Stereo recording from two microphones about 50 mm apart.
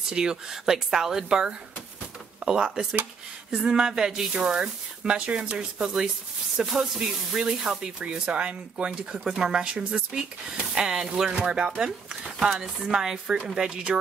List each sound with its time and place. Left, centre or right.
0.0 s speech: centre